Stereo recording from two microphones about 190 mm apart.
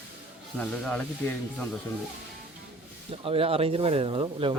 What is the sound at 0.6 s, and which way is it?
Speech, 5° left (ahead or behind).